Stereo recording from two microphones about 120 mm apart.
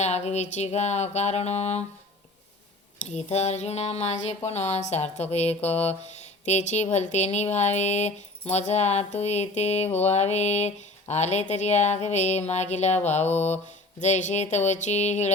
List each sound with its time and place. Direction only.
0.0 s speech: 65° left (ahead or behind)
3.0 s a woman's voice: 70° left (ahead or behind)
6.4 s speech: 75° left (ahead or behind)